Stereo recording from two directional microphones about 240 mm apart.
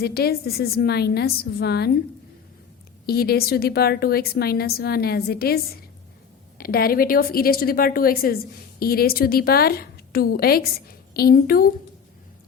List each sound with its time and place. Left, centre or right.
0.0 s a woman's voice: left
3.1 s a woman's voice: left